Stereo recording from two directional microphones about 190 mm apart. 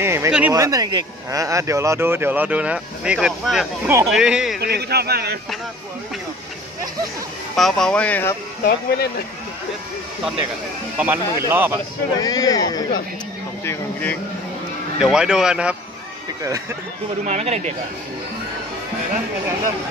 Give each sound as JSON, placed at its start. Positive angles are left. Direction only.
{"t": 0.0, "sound": "speech", "side_deg": -15}
{"t": 4.6, "sound": "a man's voice", "side_deg": -55}
{"t": 7.5, "sound": "speech", "side_deg": 0}
{"t": 8.6, "sound": "speech", "side_deg": 55}
{"t": 11.0, "sound": "speech", "side_deg": -10}
{"t": 12.2, "sound": "speech", "side_deg": 20}
{"t": 15.0, "sound": "speech", "side_deg": -5}
{"t": 17.2, "sound": "speech", "side_deg": -35}